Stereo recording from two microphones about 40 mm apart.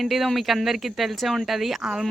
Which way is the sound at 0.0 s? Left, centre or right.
Centre.